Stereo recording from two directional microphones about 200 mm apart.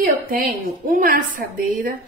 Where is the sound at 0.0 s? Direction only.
45° right (ahead or behind).